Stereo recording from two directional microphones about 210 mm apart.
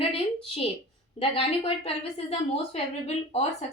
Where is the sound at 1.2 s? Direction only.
25° left (ahead or behind).